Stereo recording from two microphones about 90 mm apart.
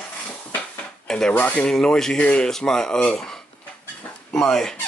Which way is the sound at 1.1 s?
10° left (ahead or behind).